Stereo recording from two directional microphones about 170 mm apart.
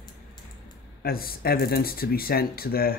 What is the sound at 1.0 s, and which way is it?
Speech, 60° left (ahead or behind).